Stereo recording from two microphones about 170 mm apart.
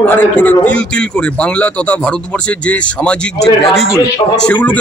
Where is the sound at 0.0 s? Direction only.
10° left (ahead or behind).